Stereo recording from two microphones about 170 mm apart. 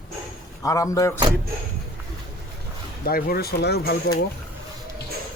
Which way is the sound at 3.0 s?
60° left (ahead or behind).